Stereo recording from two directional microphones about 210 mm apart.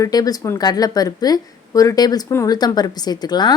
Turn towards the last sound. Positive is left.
turn(degrees=20)  # may be behind; listen again after turning